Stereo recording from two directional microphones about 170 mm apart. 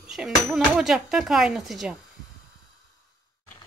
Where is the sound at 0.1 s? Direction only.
Centre (ahead or behind).